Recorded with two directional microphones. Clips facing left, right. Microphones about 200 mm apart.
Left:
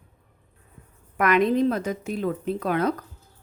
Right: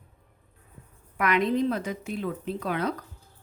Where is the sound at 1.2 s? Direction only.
50° left (ahead or behind).